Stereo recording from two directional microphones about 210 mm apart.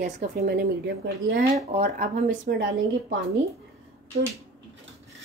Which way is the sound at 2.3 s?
60° right (ahead or behind).